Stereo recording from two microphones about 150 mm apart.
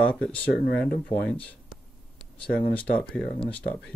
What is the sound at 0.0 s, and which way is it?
Speech, 5° left (ahead or behind).